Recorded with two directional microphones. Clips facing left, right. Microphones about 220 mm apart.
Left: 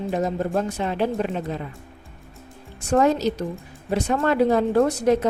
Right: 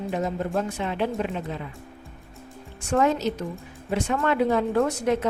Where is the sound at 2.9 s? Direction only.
35° left (ahead or behind).